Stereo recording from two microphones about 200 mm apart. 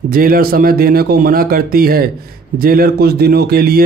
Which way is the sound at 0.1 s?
45° right (ahead or behind).